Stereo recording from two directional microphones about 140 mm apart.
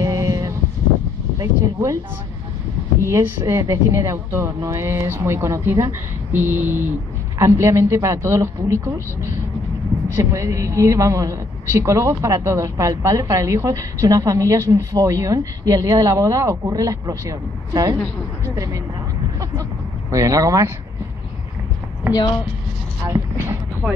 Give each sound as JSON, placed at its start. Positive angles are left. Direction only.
{"t": 0.0, "sound": "a sound", "side_deg": -25}
{"t": 1.4, "sound": "speech", "side_deg": -25}
{"t": 3.0, "sound": "a woman's voice", "side_deg": -20}
{"t": 20.1, "sound": "a woman's voice", "side_deg": -25}
{"t": 23.0, "sound": "a woman's voice", "side_deg": -20}